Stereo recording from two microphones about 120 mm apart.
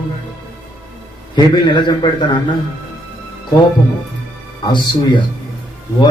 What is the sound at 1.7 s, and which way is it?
Speech, 40° left (ahead or behind).